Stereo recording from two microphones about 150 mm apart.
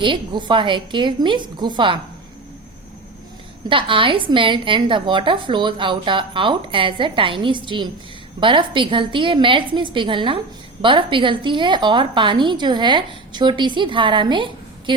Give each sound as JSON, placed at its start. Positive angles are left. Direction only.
{"t": 0.0, "sound": "a woman's voice", "side_deg": -30}
{"t": 3.7, "sound": "a woman's voice", "side_deg": -35}